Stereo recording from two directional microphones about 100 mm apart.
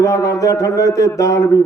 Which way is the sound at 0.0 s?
35° left (ahead or behind).